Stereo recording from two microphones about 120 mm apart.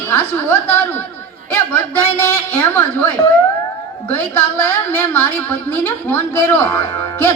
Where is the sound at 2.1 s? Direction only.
25° left (ahead or behind).